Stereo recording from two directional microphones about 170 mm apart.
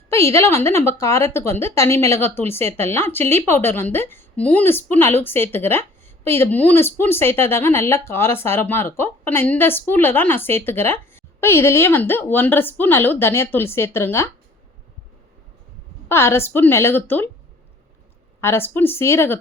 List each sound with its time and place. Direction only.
0.1 s speech: 15° left (ahead or behind)
16.0 s speech: 15° left (ahead or behind)
18.3 s speech: 15° left (ahead or behind)